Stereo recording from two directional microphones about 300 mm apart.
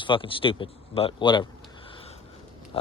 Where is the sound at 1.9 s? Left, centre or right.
Centre.